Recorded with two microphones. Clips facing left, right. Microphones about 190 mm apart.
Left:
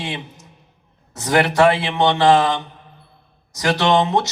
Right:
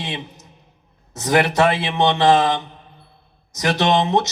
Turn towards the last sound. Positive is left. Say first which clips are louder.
# left 1 dB
turn(degrees=-20)  # may be behind; listen again after turning